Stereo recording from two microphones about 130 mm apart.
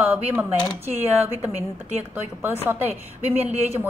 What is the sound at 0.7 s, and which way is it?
A woman's voice, 15° right (ahead or behind).